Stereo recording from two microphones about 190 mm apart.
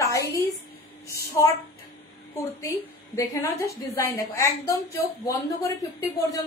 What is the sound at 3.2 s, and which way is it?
A woman's voice, 15° left (ahead or behind).